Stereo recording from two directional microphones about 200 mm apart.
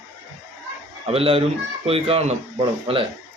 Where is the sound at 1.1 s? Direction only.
30° right (ahead or behind).